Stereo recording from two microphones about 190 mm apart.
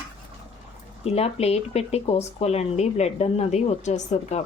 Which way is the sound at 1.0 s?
30° left (ahead or behind).